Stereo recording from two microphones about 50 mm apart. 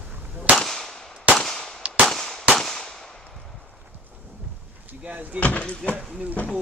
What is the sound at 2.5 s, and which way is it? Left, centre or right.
Firecracker, centre.